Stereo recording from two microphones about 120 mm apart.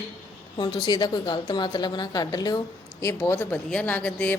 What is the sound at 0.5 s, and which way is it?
A woman's voice, 40° left (ahead or behind).